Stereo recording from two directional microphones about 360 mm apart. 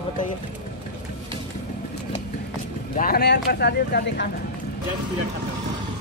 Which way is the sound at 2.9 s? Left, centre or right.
Left.